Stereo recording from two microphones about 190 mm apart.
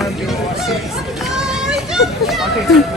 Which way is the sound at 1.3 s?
5° right (ahead or behind).